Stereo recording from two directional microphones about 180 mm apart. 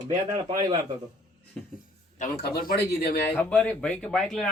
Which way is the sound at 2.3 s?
60° left (ahead or behind).